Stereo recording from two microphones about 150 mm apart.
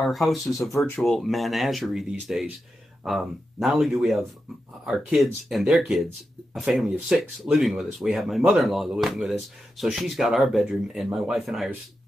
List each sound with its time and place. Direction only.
0.0 s speech: centre (ahead or behind)
0.5 s speech: 20° left (ahead or behind)
1.0 s speech: centre (ahead or behind)